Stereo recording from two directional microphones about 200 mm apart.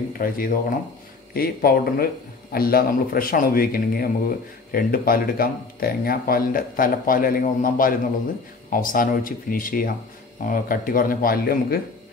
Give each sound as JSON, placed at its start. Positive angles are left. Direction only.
{"t": 0.2, "sound": "speech", "side_deg": 45}